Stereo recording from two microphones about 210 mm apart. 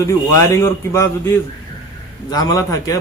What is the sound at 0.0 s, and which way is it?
A man's voice, 15° left (ahead or behind).